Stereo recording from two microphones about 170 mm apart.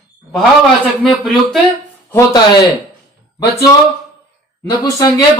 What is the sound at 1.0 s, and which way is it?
Speech, centre (ahead or behind).